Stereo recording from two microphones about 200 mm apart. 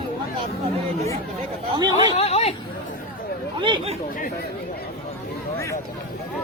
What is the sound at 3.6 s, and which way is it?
Speech, 25° right (ahead or behind).